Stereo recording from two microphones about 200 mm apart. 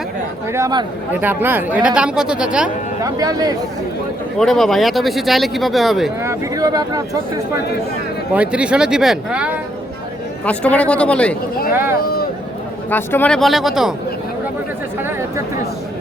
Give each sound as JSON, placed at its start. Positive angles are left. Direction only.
{"t": 0.5, "sound": "speech", "side_deg": -20}
{"t": 3.0, "sound": "speech", "side_deg": -20}
{"t": 4.4, "sound": "speech", "side_deg": 0}
{"t": 6.2, "sound": "speech", "side_deg": -20}
{"t": 8.3, "sound": "speech", "side_deg": -5}
{"t": 10.4, "sound": "speech", "side_deg": 5}
{"t": 11.7, "sound": "speech", "side_deg": -10}
{"t": 12.9, "sound": "speech", "side_deg": 10}